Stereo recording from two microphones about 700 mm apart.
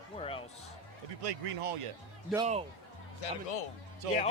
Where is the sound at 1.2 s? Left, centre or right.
Right.